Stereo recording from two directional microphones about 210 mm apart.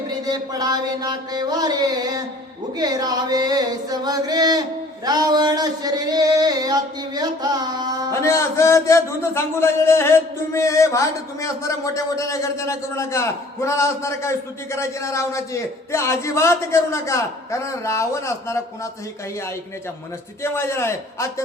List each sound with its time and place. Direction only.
0.1 s a sound: 20° right (ahead or behind)
8.1 s a man's voice: 15° left (ahead or behind)
20.4 s a man's voice: 10° left (ahead or behind)